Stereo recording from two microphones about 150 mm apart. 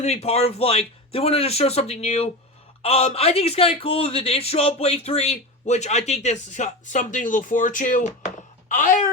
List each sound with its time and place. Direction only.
0.0 s speech: 45° left (ahead or behind)